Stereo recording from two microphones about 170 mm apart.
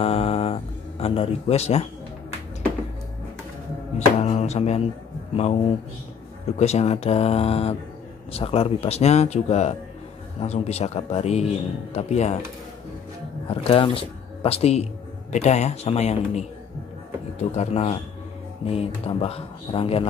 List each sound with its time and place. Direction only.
0.0 s a sound: 35° left (ahead or behind)
4.2 s music: 40° left (ahead or behind)
5.3 s speech: 40° left (ahead or behind)
6.6 s speech: 40° left (ahead or behind)
13.5 s speech: 30° left (ahead or behind)